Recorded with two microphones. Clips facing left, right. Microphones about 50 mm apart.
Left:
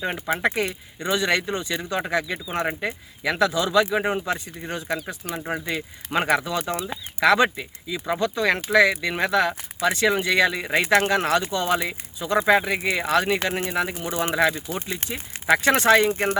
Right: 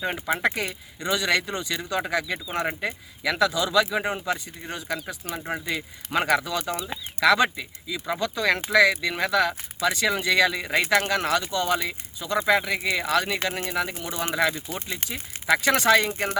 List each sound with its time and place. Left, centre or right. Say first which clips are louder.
0.0 s speech: left 1 dB; centre
1.1 s speech: left 1 dB; left
2.0 s speech: left 1 dB; centre
4.7 s speech: left 3 dB; left
5.3 s speech: left 2 dB; centre
5.7 s speech: even; centre
6.7 s speech: left 2 dB; centre
7.2 s speech: left 2 dB; left
15.6 s speech: left 3 dB; left